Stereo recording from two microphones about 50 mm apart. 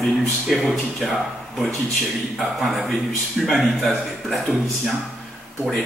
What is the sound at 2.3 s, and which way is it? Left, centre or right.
A man's voice, centre.